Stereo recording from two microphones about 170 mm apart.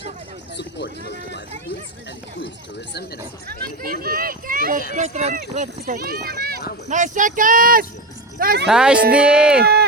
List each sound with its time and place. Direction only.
0.5 s a sound: 90° left
3.8 s speech: 60° right (ahead or behind)
4.9 s speech: 40° right (ahead or behind); by 6.6 s 60° right (ahead or behind)
6.8 s speech: 45° right (ahead or behind)
8.6 s speech: 5° right (ahead or behind)